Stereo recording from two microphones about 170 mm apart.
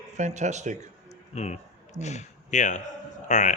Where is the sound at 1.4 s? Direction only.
40° left (ahead or behind).